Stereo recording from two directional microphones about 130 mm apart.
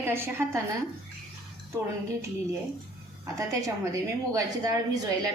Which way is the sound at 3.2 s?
25° right (ahead or behind).